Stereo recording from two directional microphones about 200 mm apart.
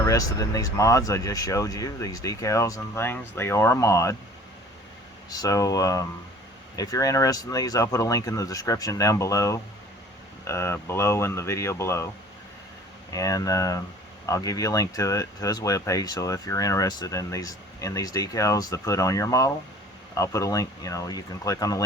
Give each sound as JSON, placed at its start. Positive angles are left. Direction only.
{"t": 0.0, "sound": "speech", "side_deg": 15}
{"t": 5.3, "sound": "speech", "side_deg": 20}
{"t": 13.1, "sound": "speech", "side_deg": 15}